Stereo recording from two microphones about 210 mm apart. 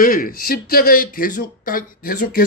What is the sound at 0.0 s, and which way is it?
Speech, 40° left (ahead or behind).